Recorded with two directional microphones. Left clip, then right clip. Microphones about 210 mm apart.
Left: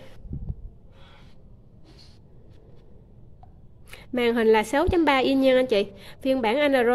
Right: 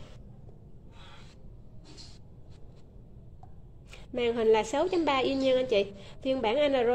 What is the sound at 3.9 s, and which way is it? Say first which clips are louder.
A woman's voice: left 6 dB; 25° left (ahead or behind).